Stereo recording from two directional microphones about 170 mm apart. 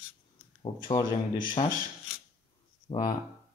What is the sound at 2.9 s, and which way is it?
Speech, 30° left (ahead or behind).